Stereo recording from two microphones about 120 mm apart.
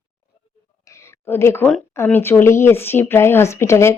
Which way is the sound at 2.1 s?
15° left (ahead or behind).